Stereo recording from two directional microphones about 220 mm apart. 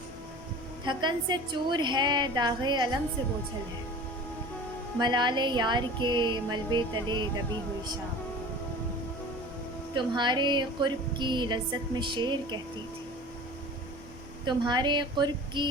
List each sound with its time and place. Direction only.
0.9 s music: 20° right (ahead or behind)
4.9 s music: 20° right (ahead or behind)
9.9 s music: 20° right (ahead or behind)
14.4 s music: 20° right (ahead or behind)